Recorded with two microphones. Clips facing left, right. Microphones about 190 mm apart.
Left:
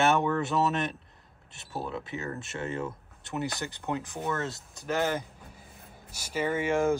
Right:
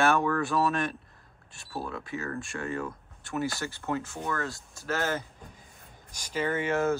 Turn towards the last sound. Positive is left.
turn(degrees=10)  # may be behind; listen again after turning